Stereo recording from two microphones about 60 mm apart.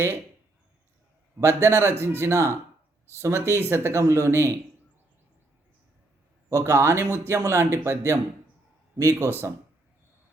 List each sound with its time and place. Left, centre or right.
1.4 s speech: right
6.5 s speech: right